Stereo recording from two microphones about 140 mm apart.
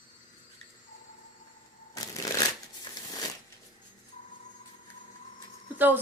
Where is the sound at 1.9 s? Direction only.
25° left (ahead or behind).